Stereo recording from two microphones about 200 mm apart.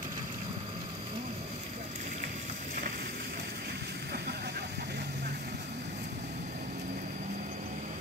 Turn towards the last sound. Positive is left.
turn(degrees=-35)  # may be behind; listen again after turning